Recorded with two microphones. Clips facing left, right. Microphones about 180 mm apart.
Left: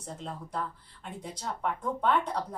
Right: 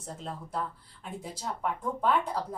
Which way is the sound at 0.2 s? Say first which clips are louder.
Right 1 dB; centre (ahead or behind).